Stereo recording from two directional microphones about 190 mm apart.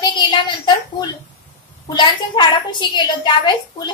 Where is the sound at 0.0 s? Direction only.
20° left (ahead or behind).